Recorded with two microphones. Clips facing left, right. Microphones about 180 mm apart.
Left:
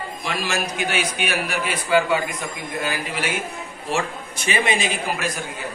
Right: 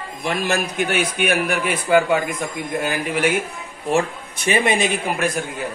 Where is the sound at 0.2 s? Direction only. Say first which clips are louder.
Right 5 dB; 55° right (ahead or behind).